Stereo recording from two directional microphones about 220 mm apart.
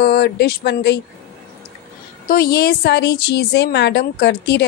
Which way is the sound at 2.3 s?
45° left (ahead or behind).